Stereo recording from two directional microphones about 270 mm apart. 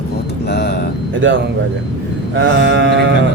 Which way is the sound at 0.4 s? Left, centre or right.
Left.